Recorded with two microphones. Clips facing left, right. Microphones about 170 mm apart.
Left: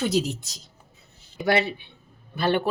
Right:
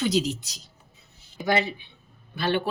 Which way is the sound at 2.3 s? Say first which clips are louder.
Left 2 dB; 45° left (ahead or behind).